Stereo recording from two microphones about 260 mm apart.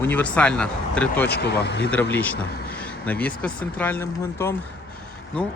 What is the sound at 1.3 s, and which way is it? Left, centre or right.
Speech, left.